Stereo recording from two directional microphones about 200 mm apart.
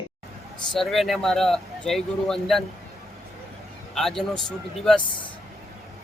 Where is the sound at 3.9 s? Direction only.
Centre (ahead or behind).